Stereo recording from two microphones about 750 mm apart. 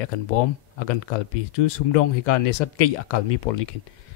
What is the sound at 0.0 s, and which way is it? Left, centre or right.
Speech, left.